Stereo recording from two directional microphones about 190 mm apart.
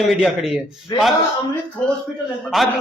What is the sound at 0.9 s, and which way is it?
Speech, 20° left (ahead or behind).